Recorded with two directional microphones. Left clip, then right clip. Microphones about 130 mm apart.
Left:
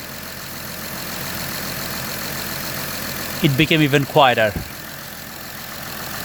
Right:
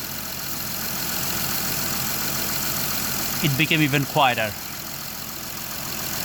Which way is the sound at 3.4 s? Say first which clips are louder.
Left 4 dB; 45° left (ahead or behind).